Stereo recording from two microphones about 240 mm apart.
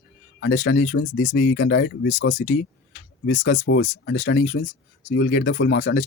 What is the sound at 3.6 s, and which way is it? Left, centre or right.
Speech, left.